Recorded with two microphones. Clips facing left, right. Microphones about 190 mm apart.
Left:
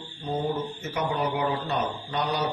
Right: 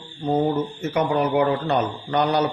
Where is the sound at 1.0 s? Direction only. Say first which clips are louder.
Right 7 dB; 65° right (ahead or behind).